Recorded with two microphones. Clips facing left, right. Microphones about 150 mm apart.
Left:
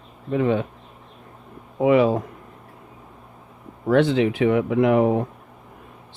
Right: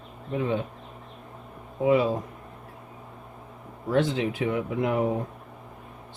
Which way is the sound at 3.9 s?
75° left (ahead or behind).